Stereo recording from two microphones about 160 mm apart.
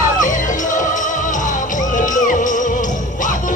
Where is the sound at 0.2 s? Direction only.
55° left (ahead or behind).